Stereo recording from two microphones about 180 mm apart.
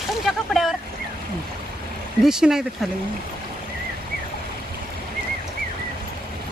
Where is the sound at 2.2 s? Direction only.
5° right (ahead or behind).